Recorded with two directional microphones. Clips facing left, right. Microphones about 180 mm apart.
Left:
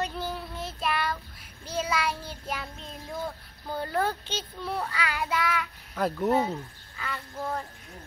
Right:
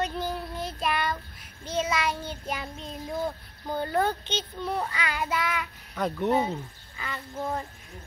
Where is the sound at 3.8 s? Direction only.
Centre (ahead or behind).